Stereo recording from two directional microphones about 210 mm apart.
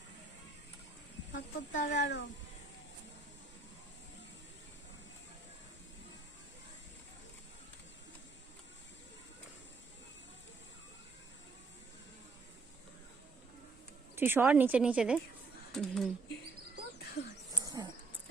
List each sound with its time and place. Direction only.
1.3 s speech: 35° left (ahead or behind)
2.0 s speech: 60° left (ahead or behind)
14.2 s a woman's voice: 10° right (ahead or behind)
15.7 s a sound: centre (ahead or behind)
17.0 s a sound: 55° left (ahead or behind)
17.6 s dog: 20° right (ahead or behind)